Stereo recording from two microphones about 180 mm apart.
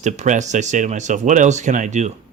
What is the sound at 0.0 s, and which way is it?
Speech, 40° right (ahead or behind).